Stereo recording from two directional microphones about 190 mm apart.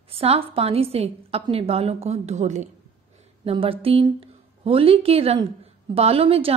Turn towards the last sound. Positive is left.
turn(degrees=-30)  # may be behind; listen again after turning